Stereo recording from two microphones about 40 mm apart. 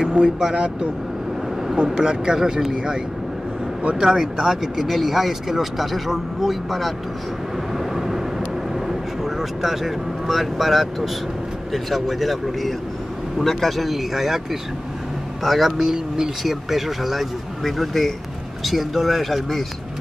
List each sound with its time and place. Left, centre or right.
0.0 s speech: centre
1.9 s a man's voice: centre
4.0 s speech: centre
7.7 s vehicle: centre
8.8 s speech: centre
15.8 s a man's voice: centre
16.4 s speech: centre